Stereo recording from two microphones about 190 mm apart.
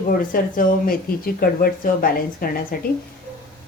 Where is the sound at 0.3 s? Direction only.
50° left (ahead or behind).